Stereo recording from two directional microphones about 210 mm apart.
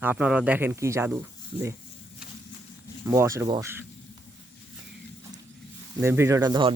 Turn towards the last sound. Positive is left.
turn(degrees=-20)  # may be behind; listen again after turning